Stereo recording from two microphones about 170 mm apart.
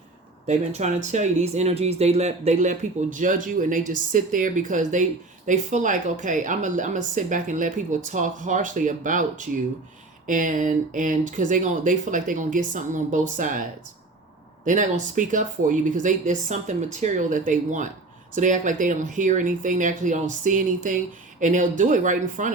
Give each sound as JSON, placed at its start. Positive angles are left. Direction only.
{"t": 0.4, "sound": "speech", "side_deg": -45}